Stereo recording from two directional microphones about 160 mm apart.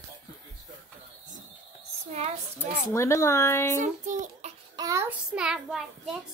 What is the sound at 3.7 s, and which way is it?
Speech, 50° right (ahead or behind).